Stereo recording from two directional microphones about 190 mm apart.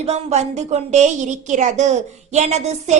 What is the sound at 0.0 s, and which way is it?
A woman's voice, 35° right (ahead or behind).